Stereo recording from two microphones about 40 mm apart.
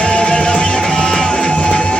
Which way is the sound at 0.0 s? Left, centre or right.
Left.